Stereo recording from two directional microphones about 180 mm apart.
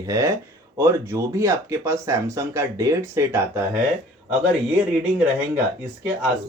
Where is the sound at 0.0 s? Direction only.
15° right (ahead or behind).